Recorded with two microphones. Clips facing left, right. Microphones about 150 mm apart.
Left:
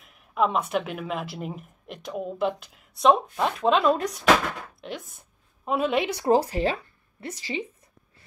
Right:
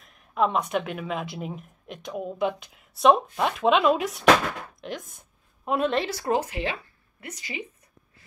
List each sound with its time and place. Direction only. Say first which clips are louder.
0.0 s speech: even; 5° left (ahead or behind)
6.3 s speech: left 5 dB; 35° left (ahead or behind)